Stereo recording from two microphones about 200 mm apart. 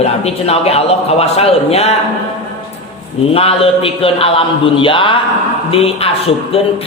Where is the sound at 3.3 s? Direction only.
30° left (ahead or behind).